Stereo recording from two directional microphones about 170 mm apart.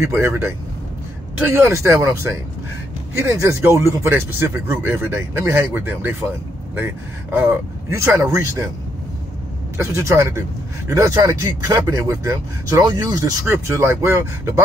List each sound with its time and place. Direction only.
0.0 s speech: 15° right (ahead or behind)
7.3 s speech: 15° right (ahead or behind)
9.8 s speech: 15° right (ahead or behind)